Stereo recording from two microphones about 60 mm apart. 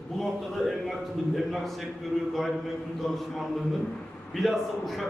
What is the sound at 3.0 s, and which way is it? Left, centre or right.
Speech, centre.